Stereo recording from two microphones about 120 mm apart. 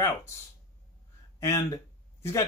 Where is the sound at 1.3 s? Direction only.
25° left (ahead or behind).